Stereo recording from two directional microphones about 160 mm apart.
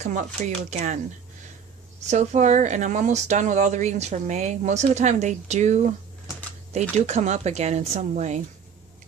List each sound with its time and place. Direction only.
0.0 s speech: 45° right (ahead or behind)
2.0 s speech: 45° right (ahead or behind)